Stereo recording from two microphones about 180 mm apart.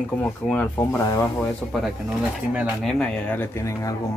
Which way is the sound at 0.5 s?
10° left (ahead or behind).